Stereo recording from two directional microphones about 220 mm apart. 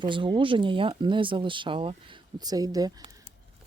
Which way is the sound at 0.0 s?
20° right (ahead or behind).